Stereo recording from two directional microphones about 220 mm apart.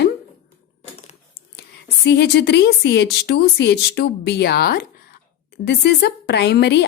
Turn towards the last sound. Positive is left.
turn(degrees=50)  # may be behind; listen again after turning